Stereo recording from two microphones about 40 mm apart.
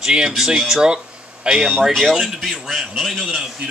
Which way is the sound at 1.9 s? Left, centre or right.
Centre.